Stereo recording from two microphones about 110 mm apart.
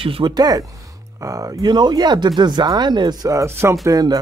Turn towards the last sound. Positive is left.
turn(degrees=-35)  # may be behind; listen again after turning